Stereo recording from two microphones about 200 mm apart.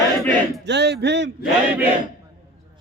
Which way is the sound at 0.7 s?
55° right (ahead or behind).